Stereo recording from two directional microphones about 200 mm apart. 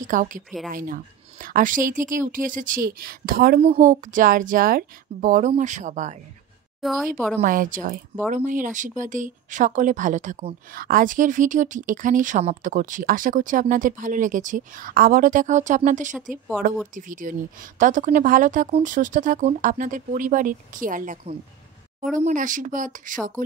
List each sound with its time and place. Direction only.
0.0 s a woman's voice: 40° right (ahead or behind)
6.8 s a woman's voice: centre (ahead or behind)
7.3 s a woman's voice: 40° right (ahead or behind)